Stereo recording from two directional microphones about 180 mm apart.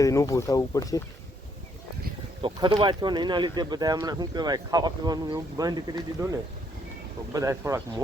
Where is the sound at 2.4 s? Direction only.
25° right (ahead or behind).